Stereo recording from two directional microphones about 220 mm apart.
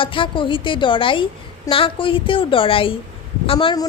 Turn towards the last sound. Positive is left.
turn(degrees=20)  # may be behind; listen again after turning